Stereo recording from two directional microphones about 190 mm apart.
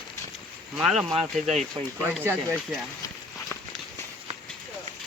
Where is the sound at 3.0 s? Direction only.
15° left (ahead or behind).